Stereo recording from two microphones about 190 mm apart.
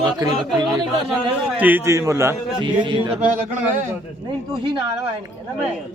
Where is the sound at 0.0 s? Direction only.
20° right (ahead or behind).